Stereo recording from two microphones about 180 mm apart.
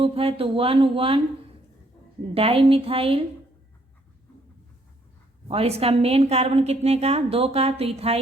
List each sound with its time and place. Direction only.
0.0 s a woman's voice: 30° right (ahead or behind)
2.3 s a woman's voice: 30° right (ahead or behind)
5.5 s a woman's voice: 35° right (ahead or behind)